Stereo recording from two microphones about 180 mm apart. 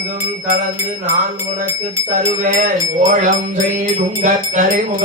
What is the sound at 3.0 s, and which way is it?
Music, 45° right (ahead or behind).